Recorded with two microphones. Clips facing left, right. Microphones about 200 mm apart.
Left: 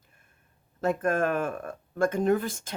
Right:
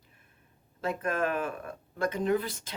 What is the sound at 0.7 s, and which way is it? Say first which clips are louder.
Speech: left 5 dB; 50° left (ahead or behind).